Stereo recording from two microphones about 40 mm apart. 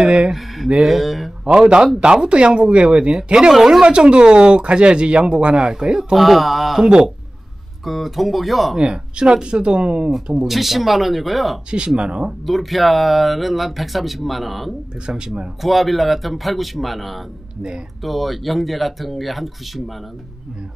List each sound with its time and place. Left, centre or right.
0.0 s speech: right
0.8 s speech: centre
1.4 s speech: right
6.1 s speech: centre
6.8 s speech: centre
7.8 s speech: centre
8.7 s speech: right
10.3 s speech: centre
11.7 s speech: right
12.4 s speech: centre
15.0 s speech: centre
15.6 s speech: centre